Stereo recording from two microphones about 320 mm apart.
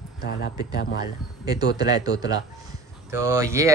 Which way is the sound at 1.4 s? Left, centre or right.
Centre.